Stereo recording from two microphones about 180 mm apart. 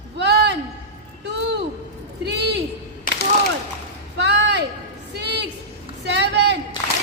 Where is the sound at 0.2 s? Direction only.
70° right (ahead or behind).